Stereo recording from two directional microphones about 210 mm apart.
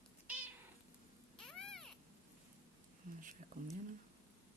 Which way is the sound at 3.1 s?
40° right (ahead or behind).